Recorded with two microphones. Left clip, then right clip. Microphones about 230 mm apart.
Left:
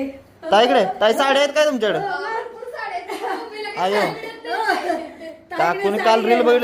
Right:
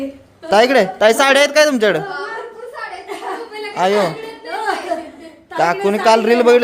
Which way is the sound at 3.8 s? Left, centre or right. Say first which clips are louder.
Right 6 dB; right.